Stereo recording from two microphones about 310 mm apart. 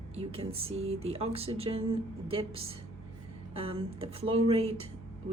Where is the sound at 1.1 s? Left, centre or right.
Centre.